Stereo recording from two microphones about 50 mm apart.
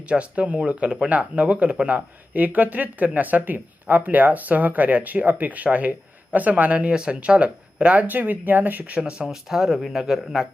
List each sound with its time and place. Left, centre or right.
0.0 s speech: right
9.0 s speech: centre